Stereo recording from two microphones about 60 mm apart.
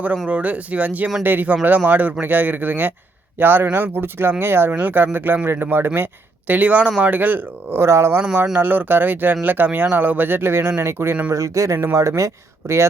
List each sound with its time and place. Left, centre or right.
0.3 s speech: right
4.7 s speech: right
6.5 s speech: right
7.8 s speech: right
8.5 s speech: right
11.3 s speech: right